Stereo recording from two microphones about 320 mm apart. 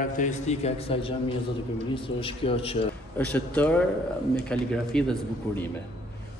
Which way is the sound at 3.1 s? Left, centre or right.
Centre.